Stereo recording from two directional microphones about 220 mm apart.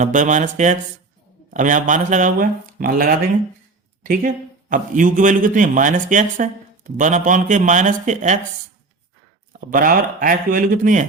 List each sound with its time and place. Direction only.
0.0 s a man's voice: 35° right (ahead or behind)
9.5 s a man's voice: 40° right (ahead or behind)